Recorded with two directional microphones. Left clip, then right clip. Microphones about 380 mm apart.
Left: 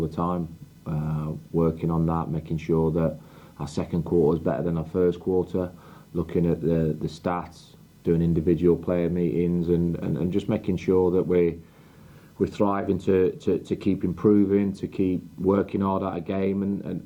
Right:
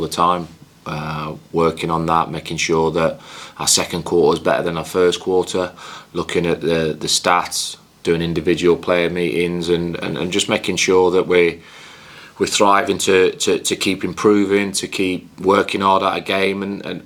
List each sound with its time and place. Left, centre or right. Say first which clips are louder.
0.1 s speech: right 13 dB; centre
0.9 s a sound: right 9 dB; centre
1.3 s speech: right 8 dB; centre
4.0 s speech: right 5 dB; centre
4.3 s speech: right 9 dB; centre
5.2 s speech: right 7 dB; centre
5.5 s speech: right 9 dB; centre